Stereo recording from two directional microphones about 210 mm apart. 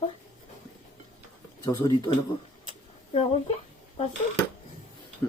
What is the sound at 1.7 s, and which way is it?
Speech, 20° left (ahead or behind).